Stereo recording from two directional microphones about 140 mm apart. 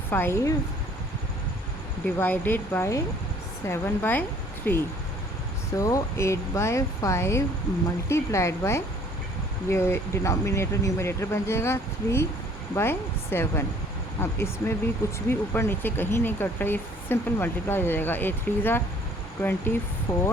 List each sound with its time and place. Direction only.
0.1 s speech: 15° left (ahead or behind)
2.1 s speech: 15° left (ahead or behind)